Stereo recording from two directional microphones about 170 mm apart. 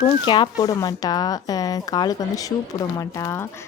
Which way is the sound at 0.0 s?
25° left (ahead or behind).